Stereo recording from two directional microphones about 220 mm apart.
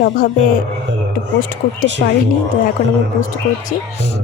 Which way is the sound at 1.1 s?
40° left (ahead or behind).